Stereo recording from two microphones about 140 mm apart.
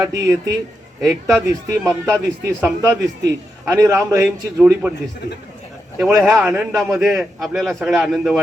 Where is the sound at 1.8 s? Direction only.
20° right (ahead or behind).